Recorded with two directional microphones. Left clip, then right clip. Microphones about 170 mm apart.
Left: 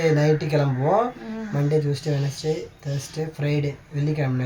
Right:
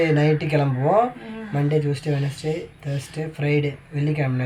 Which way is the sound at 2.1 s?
25° right (ahead or behind).